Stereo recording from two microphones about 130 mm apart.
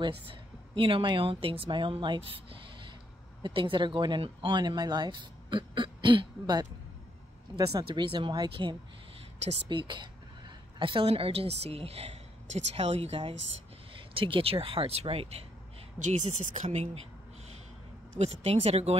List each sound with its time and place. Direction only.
0.0 s a woman's voice: 40° right (ahead or behind)
13.9 s a woman's voice: 40° right (ahead or behind)
16.0 s speech: 65° right (ahead or behind)
18.2 s a woman's voice: 50° right (ahead or behind)